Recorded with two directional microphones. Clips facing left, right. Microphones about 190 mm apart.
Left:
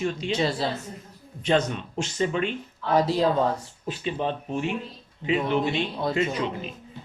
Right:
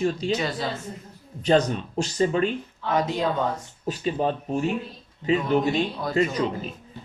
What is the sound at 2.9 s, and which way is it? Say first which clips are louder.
Speech: left 3 dB; 35° left (ahead or behind).